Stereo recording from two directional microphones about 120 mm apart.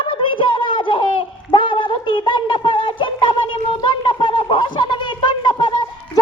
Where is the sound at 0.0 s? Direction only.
45° left (ahead or behind).